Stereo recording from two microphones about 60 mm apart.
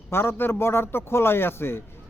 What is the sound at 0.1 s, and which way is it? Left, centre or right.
A man's voice, left.